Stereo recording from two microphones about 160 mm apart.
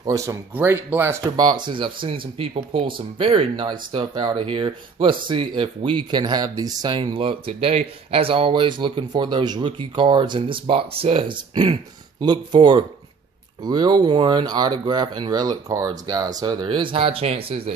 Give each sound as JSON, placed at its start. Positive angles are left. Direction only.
{"t": 0.0, "sound": "speech", "side_deg": -20}